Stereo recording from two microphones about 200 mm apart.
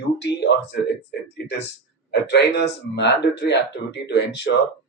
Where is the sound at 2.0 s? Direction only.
55° left (ahead or behind).